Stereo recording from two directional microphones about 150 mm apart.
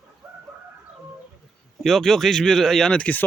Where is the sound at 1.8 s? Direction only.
Centre (ahead or behind).